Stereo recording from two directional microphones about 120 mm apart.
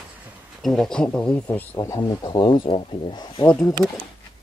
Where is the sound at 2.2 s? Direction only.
45° left (ahead or behind).